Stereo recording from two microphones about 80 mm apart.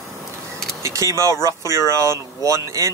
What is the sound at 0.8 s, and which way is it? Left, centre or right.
Speech, right.